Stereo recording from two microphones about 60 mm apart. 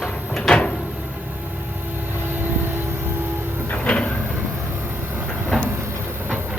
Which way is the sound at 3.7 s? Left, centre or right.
Centre.